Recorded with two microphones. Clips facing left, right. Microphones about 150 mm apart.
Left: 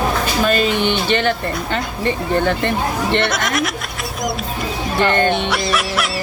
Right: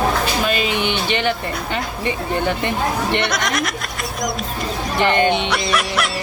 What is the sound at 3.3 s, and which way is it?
Speech, centre (ahead or behind).